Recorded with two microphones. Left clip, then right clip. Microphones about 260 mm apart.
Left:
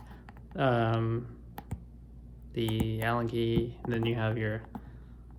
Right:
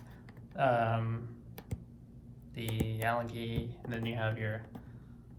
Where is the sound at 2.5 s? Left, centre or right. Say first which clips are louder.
Left 7 dB; left.